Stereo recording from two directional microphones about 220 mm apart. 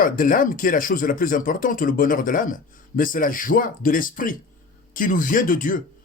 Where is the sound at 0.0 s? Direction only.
40° left (ahead or behind).